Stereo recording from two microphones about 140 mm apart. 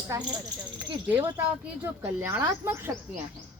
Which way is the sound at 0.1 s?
25° right (ahead or behind).